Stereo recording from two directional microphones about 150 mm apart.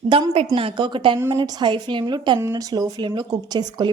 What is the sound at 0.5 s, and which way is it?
Speech, 35° right (ahead or behind).